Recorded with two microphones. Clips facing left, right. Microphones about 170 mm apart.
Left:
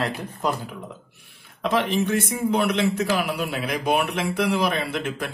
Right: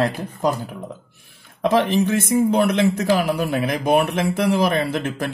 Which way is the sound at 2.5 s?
40° right (ahead or behind).